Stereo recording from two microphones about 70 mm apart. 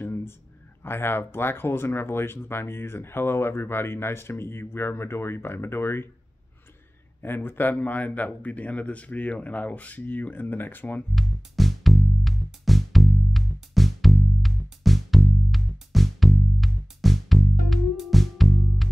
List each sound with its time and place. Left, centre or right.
0.0 s a sound: left
0.8 s speech: left
7.2 s a man's voice: left
11.1 s music: centre